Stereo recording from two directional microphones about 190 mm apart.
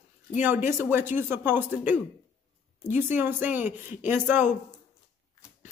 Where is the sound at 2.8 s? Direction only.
40° left (ahead or behind).